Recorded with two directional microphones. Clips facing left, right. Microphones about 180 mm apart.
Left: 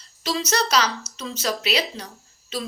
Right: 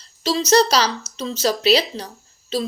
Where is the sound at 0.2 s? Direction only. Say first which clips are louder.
Right 8 dB; 30° right (ahead or behind).